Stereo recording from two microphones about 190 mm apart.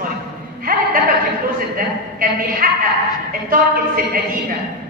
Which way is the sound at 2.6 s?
50° right (ahead or behind).